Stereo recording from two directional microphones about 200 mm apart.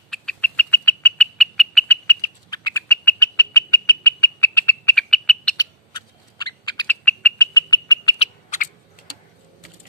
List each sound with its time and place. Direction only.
0.1 s bird: 5° left (ahead or behind)
2.0 s bird: 15° left (ahead or behind)
4.0 s frog: 15° left (ahead or behind)
5.6 s bird: 20° left (ahead or behind)
6.9 s bird: 10° left (ahead or behind)
7.5 s frog: 20° left (ahead or behind)
8.2 s owl: 40° left (ahead or behind)